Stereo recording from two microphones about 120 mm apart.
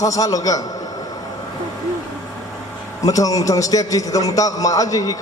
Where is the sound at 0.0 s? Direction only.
30° left (ahead or behind).